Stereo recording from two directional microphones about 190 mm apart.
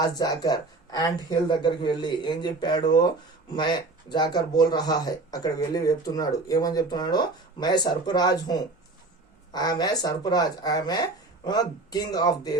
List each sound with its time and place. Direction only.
0.0 s speech: 20° left (ahead or behind)